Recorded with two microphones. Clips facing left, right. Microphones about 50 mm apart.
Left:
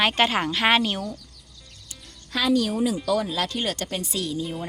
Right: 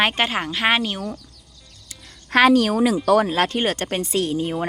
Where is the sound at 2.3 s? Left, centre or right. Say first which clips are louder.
Right 7 dB; right.